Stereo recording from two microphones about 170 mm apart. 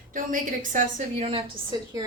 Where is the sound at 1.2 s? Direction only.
30° right (ahead or behind).